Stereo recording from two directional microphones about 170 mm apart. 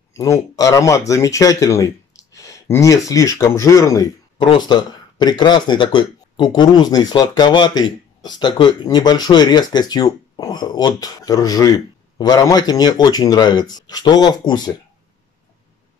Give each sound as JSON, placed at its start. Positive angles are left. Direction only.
{"t": 0.1, "sound": "speech", "side_deg": 20}